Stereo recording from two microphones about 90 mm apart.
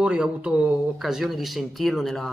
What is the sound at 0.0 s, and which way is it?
Speech, 10° right (ahead or behind).